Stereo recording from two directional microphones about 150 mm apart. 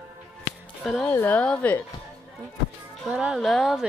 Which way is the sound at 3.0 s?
5° right (ahead or behind).